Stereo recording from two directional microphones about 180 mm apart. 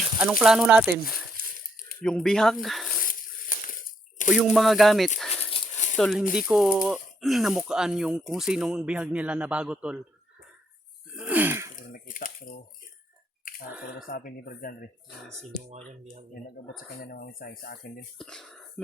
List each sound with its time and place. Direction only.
0.2 s speech: 5° right (ahead or behind)
0.9 s speech: 55° left (ahead or behind)
2.0 s speech: 5° left (ahead or behind)
3.0 s a sound: 50° left (ahead or behind)
4.5 s speech: centre (ahead or behind)
5.5 s dog: 30° left (ahead or behind)
6.0 s speech: centre (ahead or behind)
11.1 s a sound: 10° right (ahead or behind)
11.9 s a sound: 50° left (ahead or behind)
13.8 s speech: 50° left (ahead or behind)
17.0 s speech: 55° left (ahead or behind)
18.2 s speech: 5° left (ahead or behind)